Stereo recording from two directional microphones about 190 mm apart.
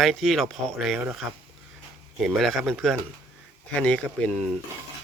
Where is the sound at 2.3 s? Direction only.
Centre (ahead or behind).